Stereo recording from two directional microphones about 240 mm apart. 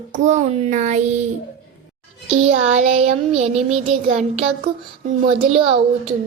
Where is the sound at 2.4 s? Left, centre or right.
Right.